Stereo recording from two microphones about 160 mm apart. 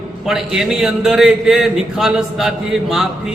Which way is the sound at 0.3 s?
Centre (ahead or behind).